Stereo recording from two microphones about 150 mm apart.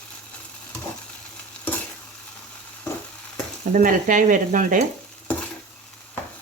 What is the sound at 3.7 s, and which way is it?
Frying, 60° right (ahead or behind).